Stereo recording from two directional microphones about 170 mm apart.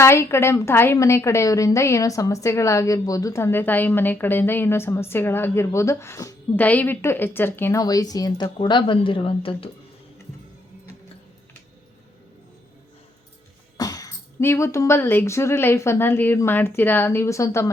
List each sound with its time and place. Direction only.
0.0 s a woman's voice: 15° left (ahead or behind); by 9.6 s 30° left (ahead or behind)
13.7 s a woman's voice: 20° left (ahead or behind)